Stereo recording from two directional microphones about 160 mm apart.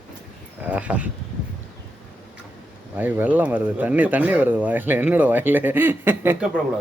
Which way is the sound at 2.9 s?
10° right (ahead or behind).